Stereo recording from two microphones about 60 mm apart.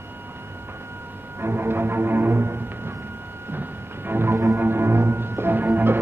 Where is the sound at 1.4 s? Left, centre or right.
Right.